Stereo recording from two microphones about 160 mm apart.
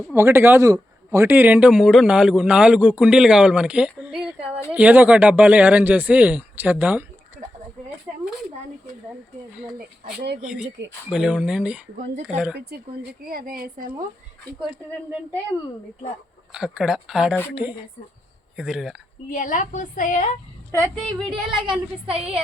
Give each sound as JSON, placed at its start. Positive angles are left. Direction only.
{"t": 0.1, "sound": "speech", "side_deg": -15}
{"t": 8.1, "sound": "a sound", "side_deg": -5}
{"t": 9.7, "sound": "speech", "side_deg": -70}
{"t": 11.1, "sound": "speech", "side_deg": -5}
{"t": 11.9, "sound": "speech", "side_deg": -45}
{"t": 12.5, "sound": "speech", "side_deg": -70}
{"t": 16.5, "sound": "speech", "side_deg": -5}
{"t": 19.3, "sound": "a woman's voice", "side_deg": 50}
{"t": 20.9, "sound": "speech", "side_deg": 0}
{"t": 22.1, "sound": "a woman's voice", "side_deg": -35}